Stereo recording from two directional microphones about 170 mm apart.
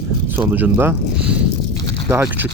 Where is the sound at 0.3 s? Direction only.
10° right (ahead or behind).